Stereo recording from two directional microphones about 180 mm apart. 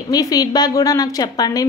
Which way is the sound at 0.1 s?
20° left (ahead or behind).